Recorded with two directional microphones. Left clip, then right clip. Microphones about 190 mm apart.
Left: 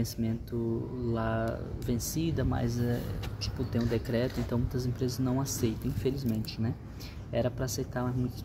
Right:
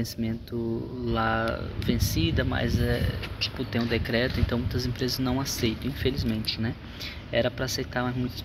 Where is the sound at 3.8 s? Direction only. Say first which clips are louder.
Right 5 dB; centre (ahead or behind).